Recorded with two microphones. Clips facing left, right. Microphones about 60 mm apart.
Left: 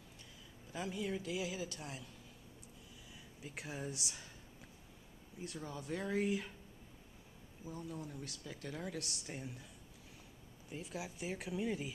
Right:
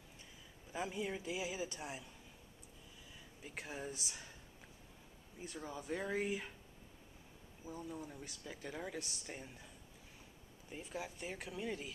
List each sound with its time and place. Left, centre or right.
0.7 s speech: centre
3.4 s speech: centre
5.6 s speech: centre
7.9 s speech: centre
10.7 s speech: centre